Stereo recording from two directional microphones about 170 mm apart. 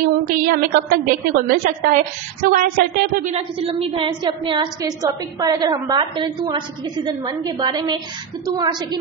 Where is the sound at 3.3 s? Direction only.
35° right (ahead or behind).